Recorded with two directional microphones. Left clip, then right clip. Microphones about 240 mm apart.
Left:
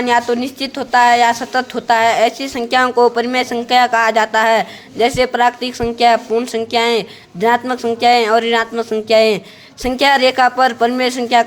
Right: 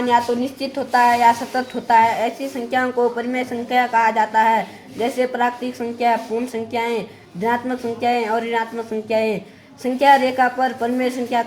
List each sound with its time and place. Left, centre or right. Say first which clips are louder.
0.8 s a woman's voice: left 4 dB; left